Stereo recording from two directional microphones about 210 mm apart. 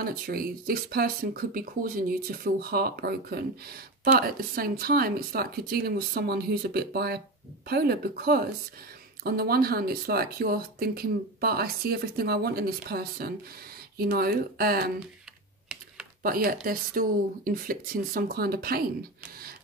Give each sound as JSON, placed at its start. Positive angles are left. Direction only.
{"t": 0.0, "sound": "speech", "side_deg": -45}
{"t": 16.2, "sound": "speech", "side_deg": -45}